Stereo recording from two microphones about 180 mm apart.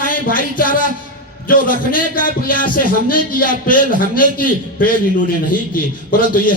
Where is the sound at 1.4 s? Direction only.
50° left (ahead or behind).